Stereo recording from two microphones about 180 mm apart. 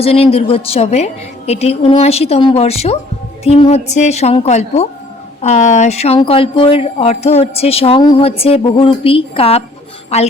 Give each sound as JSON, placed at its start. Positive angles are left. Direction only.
{"t": 0.0, "sound": "speech", "side_deg": 35}